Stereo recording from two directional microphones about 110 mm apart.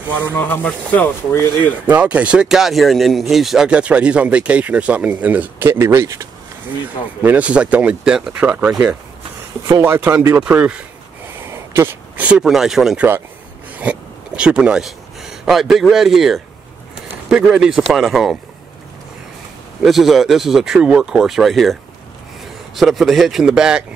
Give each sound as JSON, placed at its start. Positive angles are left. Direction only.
{"t": 0.4, "sound": "speech", "side_deg": 15}
{"t": 1.9, "sound": "speech", "side_deg": -15}
{"t": 7.2, "sound": "speech", "side_deg": -10}
{"t": 10.4, "sound": "speech", "side_deg": -10}
{"t": 19.8, "sound": "speech", "side_deg": 0}
{"t": 22.8, "sound": "speech", "side_deg": 0}